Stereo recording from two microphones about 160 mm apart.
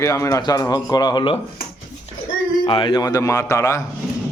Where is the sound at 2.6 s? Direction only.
30° left (ahead or behind).